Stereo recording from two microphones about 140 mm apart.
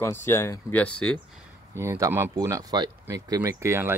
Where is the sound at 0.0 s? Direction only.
20° left (ahead or behind).